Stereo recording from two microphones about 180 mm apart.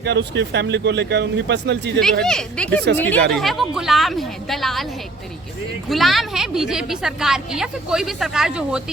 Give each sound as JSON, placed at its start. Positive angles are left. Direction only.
{"t": 0.0, "sound": "speech", "side_deg": -70}
{"t": 2.2, "sound": "a woman's voice", "side_deg": 5}
{"t": 5.9, "sound": "a woman's voice", "side_deg": 0}